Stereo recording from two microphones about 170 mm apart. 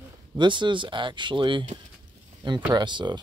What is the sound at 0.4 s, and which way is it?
Speech, 25° right (ahead or behind).